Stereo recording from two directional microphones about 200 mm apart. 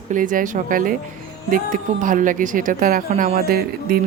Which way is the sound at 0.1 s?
40° right (ahead or behind).